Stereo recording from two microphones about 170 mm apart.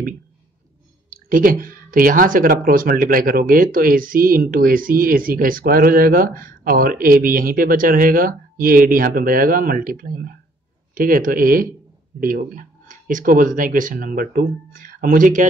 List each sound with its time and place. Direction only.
1.1 s speech: 55° right (ahead or behind)